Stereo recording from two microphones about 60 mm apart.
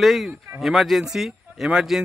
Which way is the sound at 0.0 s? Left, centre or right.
Centre.